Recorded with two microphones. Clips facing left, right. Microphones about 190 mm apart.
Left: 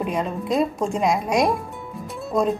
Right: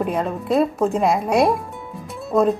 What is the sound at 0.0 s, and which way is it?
A woman's voice, 5° right (ahead or behind).